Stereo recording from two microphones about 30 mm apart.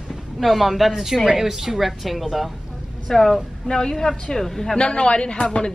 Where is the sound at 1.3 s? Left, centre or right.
Centre.